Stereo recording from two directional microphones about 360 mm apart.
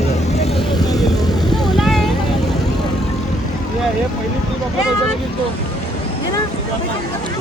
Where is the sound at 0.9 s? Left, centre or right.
Centre.